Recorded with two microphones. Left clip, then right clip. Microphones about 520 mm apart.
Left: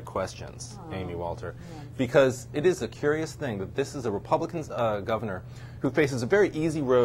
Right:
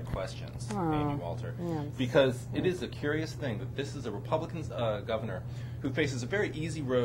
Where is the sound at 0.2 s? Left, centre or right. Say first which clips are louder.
Left 7 dB; left.